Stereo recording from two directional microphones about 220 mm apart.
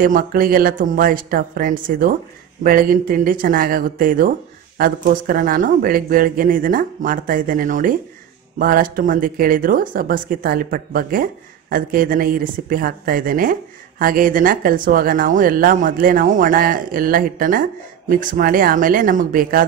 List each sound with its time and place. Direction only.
0.0 s speech: 40° right (ahead or behind)